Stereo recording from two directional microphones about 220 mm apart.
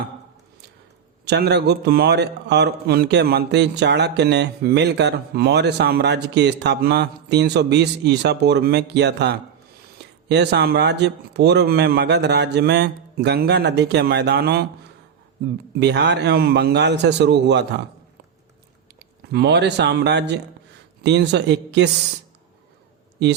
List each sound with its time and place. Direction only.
1.3 s a man's voice: 50° right (ahead or behind)
15.8 s a man's voice: 50° right (ahead or behind)
18.9 s a man's voice: 45° right (ahead or behind)